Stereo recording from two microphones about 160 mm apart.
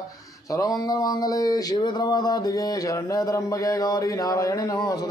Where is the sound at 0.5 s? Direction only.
20° left (ahead or behind).